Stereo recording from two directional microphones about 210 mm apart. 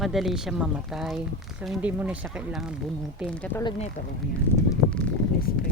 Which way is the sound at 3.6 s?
25° left (ahead or behind).